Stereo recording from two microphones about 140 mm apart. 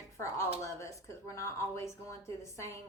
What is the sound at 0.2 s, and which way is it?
Speech, 20° left (ahead or behind).